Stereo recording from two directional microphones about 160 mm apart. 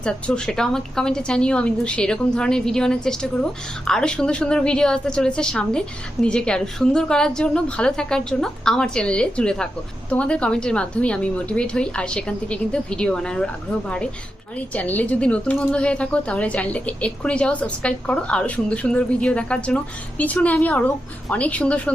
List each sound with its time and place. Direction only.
0.0 s a woman's voice: 5° left (ahead or behind)